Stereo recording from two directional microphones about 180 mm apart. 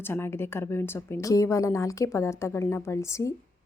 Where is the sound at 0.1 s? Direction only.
15° left (ahead or behind).